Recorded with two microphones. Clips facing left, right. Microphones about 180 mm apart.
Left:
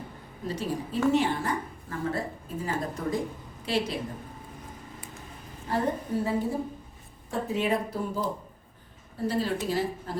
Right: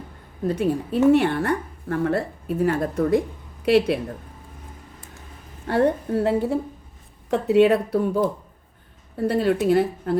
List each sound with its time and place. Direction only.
0.4 s speech: 55° right (ahead or behind)
5.6 s speech: 70° right (ahead or behind)